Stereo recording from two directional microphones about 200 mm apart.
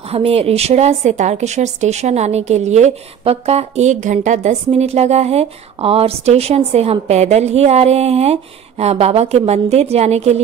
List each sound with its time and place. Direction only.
0.1 s a woman's voice: 30° right (ahead or behind)